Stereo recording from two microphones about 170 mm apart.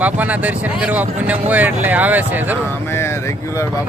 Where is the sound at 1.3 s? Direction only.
10° right (ahead or behind).